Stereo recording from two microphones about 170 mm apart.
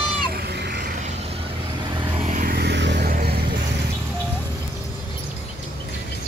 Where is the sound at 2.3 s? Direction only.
50° right (ahead or behind).